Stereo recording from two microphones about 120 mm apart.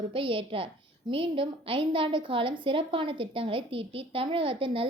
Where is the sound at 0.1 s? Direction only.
45° right (ahead or behind).